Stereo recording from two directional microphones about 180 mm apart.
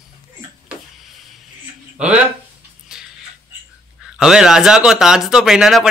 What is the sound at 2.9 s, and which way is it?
Music, centre (ahead or behind).